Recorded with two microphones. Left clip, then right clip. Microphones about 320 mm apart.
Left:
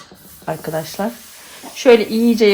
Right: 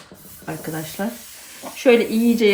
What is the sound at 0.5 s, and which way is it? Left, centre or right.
Speech, centre.